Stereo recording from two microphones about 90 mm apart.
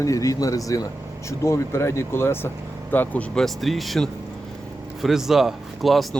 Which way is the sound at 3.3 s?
5° left (ahead or behind).